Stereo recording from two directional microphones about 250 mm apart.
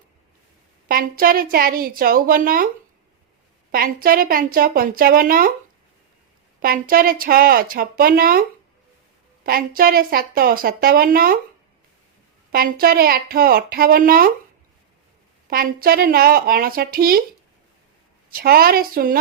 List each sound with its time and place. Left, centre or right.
0.9 s a woman's voice: right
3.7 s a woman's voice: right
6.6 s a woman's voice: right
12.5 s a woman's voice: right
15.4 s a woman's voice: right
18.3 s a woman's voice: right